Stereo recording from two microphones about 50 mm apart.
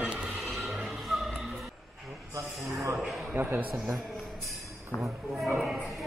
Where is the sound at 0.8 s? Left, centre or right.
Centre.